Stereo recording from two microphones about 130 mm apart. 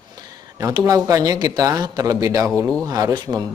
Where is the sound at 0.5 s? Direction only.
25° right (ahead or behind).